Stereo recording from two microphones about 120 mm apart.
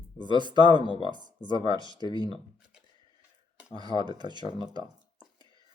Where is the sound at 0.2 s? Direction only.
40° right (ahead or behind).